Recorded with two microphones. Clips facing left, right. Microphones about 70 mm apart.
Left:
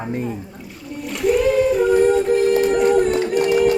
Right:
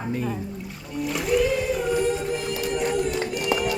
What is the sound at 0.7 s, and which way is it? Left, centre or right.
Music, centre.